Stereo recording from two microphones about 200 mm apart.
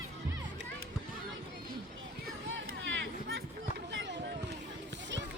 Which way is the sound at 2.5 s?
70° right (ahead or behind).